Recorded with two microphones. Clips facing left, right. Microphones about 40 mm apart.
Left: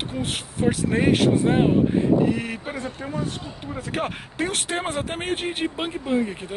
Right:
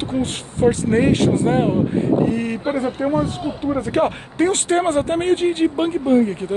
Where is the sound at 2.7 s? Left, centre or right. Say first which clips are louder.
Right 10 dB; right.